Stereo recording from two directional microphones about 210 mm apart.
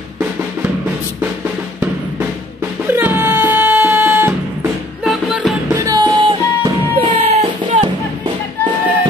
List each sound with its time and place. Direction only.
2.9 s music: 10° right (ahead or behind)
5.7 s music: 15° right (ahead or behind)